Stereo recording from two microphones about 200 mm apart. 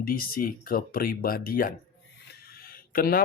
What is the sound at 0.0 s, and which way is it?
Speech, 45° left (ahead or behind).